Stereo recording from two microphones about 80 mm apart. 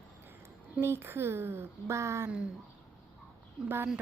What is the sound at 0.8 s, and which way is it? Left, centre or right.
Speech, right.